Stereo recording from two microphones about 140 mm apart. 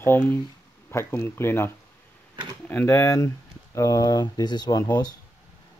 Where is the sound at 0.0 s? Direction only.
15° left (ahead or behind).